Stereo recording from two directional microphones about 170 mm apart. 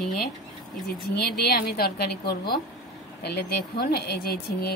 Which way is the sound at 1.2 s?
65° left (ahead or behind).